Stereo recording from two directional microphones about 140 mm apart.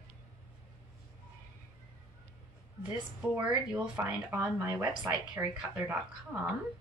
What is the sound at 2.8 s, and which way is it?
Speech, 15° right (ahead or behind).